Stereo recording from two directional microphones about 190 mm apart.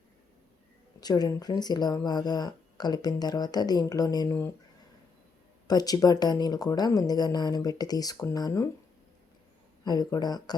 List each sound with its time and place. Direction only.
1.0 s speech: 20° left (ahead or behind)
5.6 s speech: 20° left (ahead or behind)
9.8 s speech: 20° left (ahead or behind)